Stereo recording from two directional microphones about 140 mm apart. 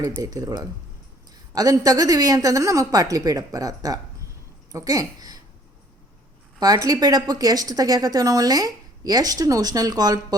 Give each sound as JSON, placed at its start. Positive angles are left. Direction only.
{"t": 0.2, "sound": "a woman's voice", "side_deg": -25}
{"t": 6.6, "sound": "a woman's voice", "side_deg": -25}